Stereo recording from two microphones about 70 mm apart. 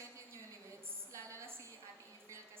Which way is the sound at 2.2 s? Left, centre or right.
Right.